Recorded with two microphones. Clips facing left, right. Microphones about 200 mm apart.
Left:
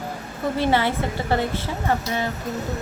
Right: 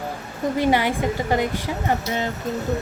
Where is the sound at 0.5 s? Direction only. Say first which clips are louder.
Right 1 dB; 15° right (ahead or behind).